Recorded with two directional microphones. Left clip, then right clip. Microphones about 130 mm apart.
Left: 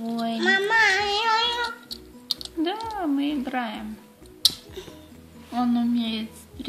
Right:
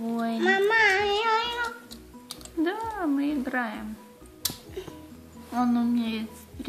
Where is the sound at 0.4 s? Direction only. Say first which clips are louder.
Left 2 dB; 40° left (ahead or behind).